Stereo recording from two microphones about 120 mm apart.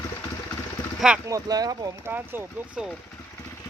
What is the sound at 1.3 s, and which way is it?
Speech, 30° right (ahead or behind).